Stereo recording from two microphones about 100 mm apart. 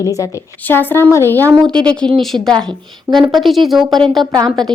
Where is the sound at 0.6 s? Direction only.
20° left (ahead or behind).